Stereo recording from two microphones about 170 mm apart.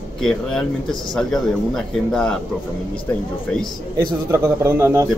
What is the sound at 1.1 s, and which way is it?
A man's voice, 5° left (ahead or behind).